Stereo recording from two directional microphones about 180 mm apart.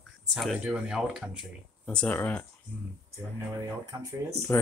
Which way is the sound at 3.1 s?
20° right (ahead or behind).